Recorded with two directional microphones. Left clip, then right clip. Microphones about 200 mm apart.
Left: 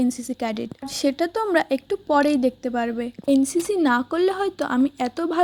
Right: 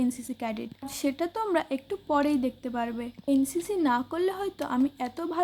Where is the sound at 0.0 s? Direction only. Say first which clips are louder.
Left 6 dB; 25° left (ahead or behind).